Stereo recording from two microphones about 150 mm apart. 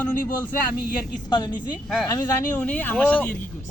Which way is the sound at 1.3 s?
30° left (ahead or behind).